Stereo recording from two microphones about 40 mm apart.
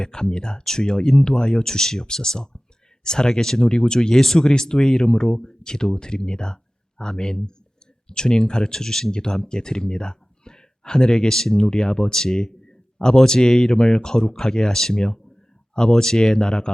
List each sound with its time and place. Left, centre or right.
0.0 s speech: centre